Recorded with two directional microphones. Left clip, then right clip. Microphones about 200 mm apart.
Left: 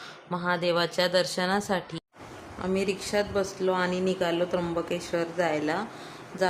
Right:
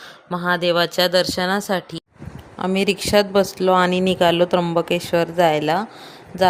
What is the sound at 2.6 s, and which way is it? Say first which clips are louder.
A woman's voice: right 8 dB; 45° right (ahead or behind).